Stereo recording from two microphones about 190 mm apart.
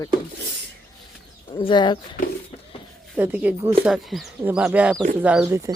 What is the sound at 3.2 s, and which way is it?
Speech, 5° right (ahead or behind).